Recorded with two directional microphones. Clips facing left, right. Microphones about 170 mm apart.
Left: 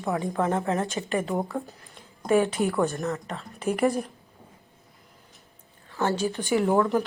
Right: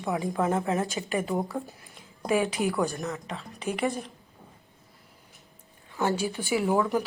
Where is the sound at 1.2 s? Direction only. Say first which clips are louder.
Left 1 dB; centre (ahead or behind).